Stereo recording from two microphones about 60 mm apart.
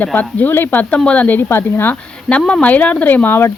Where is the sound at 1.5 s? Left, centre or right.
Left.